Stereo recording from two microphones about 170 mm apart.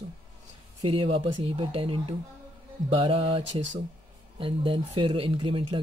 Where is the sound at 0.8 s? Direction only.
35° right (ahead or behind).